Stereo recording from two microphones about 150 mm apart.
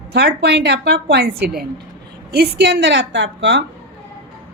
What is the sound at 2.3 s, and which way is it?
Speech, 90° right.